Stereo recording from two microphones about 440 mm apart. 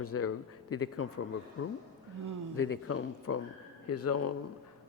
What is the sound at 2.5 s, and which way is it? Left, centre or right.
A man's voice, left.